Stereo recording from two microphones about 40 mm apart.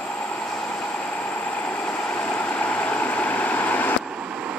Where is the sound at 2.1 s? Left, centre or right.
Left.